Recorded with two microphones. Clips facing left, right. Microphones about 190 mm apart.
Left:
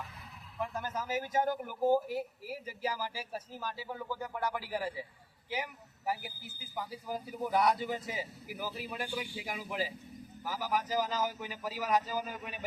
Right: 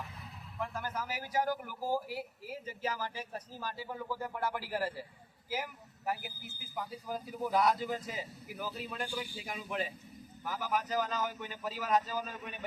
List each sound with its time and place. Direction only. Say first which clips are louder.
0.6 s speech: left 1 dB; 20° left (ahead or behind)
2.1 s a man's voice: left 4 dB; 10° left (ahead or behind)
6.1 s a man's voice: left 1 dB; centre (ahead or behind)